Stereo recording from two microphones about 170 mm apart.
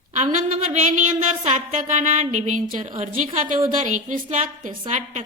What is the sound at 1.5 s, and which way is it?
A woman's voice, 45° right (ahead or behind).